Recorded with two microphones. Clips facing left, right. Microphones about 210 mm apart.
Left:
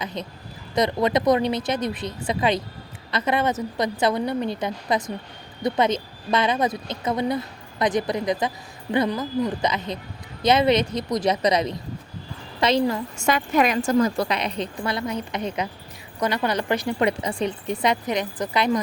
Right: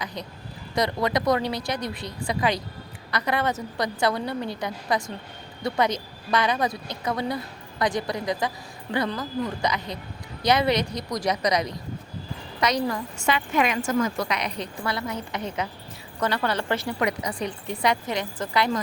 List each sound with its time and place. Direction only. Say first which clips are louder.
0.0 s a sound: left 3 dB; 20° left (ahead or behind)
0.8 s a woman's voice: left 3 dB; 20° left (ahead or behind)
13.1 s a woman's voice: left 3 dB; 45° left (ahead or behind); by 16.9 s 15° left (ahead or behind)
17.0 s a woman's voice: left 4 dB; 25° left (ahead or behind)